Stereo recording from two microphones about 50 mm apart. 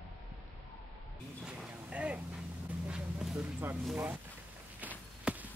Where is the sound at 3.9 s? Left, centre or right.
Right.